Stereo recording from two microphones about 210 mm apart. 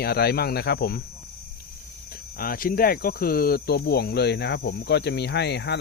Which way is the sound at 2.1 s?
45° left (ahead or behind).